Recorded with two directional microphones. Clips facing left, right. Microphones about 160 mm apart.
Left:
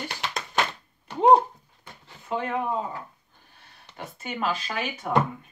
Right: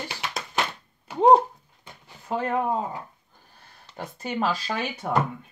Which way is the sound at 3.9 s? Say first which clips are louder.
Right 4 dB; 35° right (ahead or behind).